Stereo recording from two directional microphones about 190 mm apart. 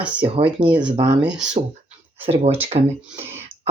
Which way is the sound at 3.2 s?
10° right (ahead or behind).